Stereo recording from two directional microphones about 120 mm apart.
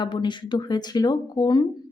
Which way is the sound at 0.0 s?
40° left (ahead or behind).